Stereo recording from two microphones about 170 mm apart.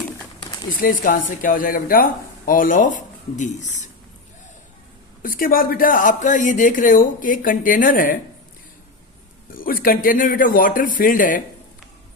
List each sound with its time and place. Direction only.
0.8 s speech: 55° left (ahead or behind)
5.2 s speech: 55° left (ahead or behind)
9.5 s speech: 55° left (ahead or behind)